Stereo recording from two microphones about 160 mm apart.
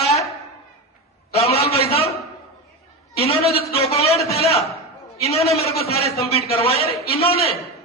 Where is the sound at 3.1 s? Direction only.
40° left (ahead or behind).